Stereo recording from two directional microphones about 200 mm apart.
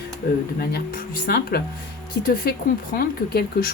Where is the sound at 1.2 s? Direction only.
50° left (ahead or behind).